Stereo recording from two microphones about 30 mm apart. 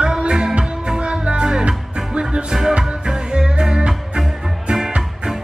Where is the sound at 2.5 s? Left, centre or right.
Centre.